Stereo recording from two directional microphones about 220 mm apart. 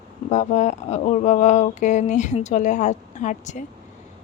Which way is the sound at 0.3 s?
30° left (ahead or behind).